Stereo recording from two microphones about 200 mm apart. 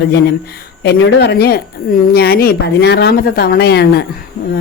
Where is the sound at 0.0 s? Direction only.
55° left (ahead or behind).